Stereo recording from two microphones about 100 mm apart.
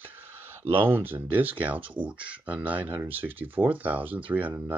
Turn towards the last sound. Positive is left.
turn(degrees=-15)  # may be behind; listen again after turning